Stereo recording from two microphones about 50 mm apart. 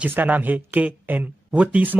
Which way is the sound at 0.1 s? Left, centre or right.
Right.